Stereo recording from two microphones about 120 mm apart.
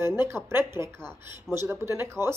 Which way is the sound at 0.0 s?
20° right (ahead or behind).